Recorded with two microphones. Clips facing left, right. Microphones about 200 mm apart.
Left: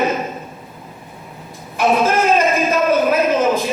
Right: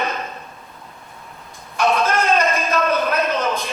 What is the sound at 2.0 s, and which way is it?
A man's voice, 5° left (ahead or behind).